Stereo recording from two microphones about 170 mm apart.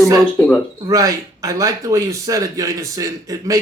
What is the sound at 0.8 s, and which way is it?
Speech, 20° right (ahead or behind).